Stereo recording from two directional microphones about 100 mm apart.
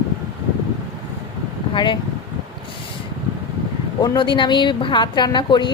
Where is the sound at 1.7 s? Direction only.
55° left (ahead or behind).